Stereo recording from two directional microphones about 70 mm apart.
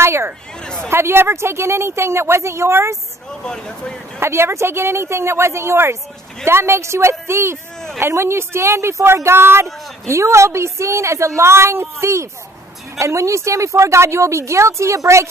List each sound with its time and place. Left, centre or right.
0.0 s speech: right
3.3 s speech: centre
4.2 s a woman's voice: right